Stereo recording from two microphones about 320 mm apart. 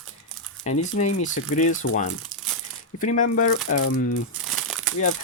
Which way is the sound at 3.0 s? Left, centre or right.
Left.